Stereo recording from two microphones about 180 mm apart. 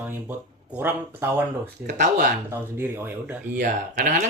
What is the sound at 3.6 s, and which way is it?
Speech, 45° right (ahead or behind).